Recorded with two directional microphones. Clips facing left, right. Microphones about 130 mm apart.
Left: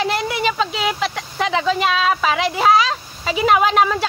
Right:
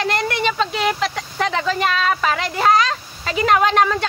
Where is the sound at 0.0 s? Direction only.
5° left (ahead or behind).